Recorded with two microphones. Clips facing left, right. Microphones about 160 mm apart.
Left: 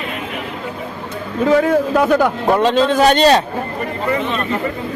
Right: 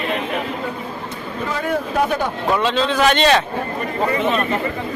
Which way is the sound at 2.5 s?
45° left (ahead or behind).